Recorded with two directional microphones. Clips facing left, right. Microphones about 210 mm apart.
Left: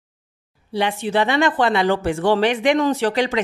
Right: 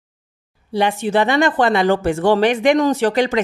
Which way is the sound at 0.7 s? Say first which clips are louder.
Right 3 dB; 45° right (ahead or behind).